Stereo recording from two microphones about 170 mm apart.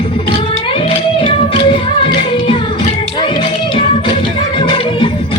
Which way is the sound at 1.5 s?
30° left (ahead or behind).